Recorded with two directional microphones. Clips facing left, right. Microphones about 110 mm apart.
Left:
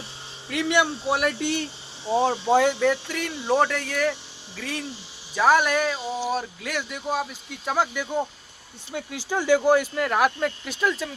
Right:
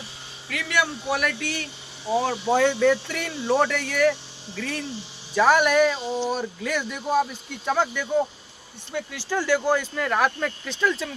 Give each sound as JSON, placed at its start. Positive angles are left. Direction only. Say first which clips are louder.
{"t": 0.5, "sound": "speech", "louder": "left 3 dB", "side_deg": 25}
{"t": 2.5, "sound": "speech", "louder": "right 2 dB", "side_deg": 15}
{"t": 9.0, "sound": "speech", "louder": "right 1 dB", "side_deg": 15}